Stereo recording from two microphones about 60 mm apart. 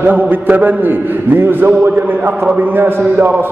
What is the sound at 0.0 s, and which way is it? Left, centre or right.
A man's voice, right.